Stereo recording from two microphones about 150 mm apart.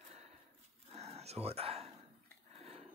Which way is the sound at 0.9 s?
45° right (ahead or behind).